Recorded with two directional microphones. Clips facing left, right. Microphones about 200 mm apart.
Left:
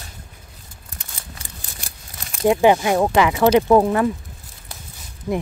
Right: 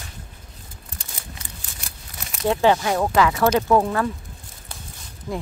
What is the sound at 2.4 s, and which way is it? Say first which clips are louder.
Speech: left 4 dB; 15° left (ahead or behind).